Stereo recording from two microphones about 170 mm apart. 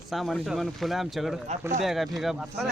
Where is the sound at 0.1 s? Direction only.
Centre (ahead or behind).